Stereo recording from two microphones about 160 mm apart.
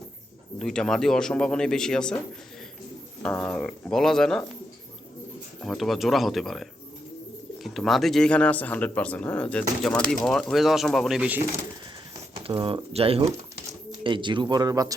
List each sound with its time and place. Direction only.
0.6 s speech: 5° left (ahead or behind)
3.2 s speech: 10° left (ahead or behind)
5.6 s speech: centre (ahead or behind)
12.4 s speech: 35° right (ahead or behind)